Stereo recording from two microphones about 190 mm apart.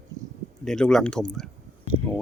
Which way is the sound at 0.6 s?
5° left (ahead or behind).